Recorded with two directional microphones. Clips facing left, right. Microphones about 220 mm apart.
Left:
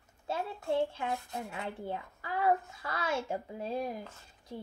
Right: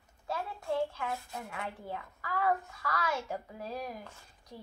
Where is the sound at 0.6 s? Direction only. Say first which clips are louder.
Left 2 dB; 25° left (ahead or behind).